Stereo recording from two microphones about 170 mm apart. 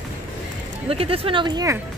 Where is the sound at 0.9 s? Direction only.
35° right (ahead or behind).